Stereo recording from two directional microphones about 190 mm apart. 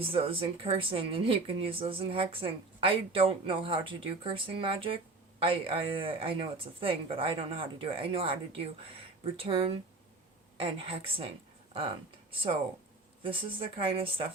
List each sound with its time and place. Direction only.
0.0 s speech: 30° right (ahead or behind)